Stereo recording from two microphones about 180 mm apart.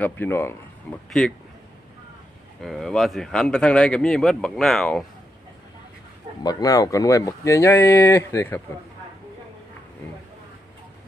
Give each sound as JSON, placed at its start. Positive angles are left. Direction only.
{"t": 0.0, "sound": "speech", "side_deg": 10}
{"t": 2.6, "sound": "speech", "side_deg": 0}
{"t": 6.4, "sound": "speech", "side_deg": 20}